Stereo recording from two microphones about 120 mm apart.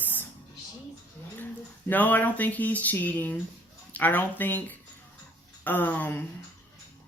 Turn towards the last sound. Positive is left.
turn(degrees=15)  # may be behind; listen again after turning